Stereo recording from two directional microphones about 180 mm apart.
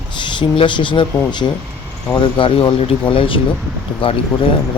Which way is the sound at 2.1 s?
30° left (ahead or behind).